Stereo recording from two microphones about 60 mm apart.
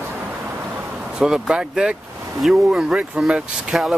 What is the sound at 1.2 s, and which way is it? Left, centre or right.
Speech, centre.